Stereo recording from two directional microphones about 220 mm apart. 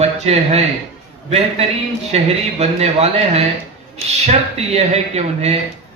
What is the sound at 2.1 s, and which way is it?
A man's voice, 30° right (ahead or behind).